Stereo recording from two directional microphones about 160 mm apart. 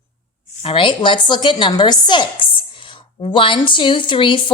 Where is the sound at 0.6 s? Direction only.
35° left (ahead or behind).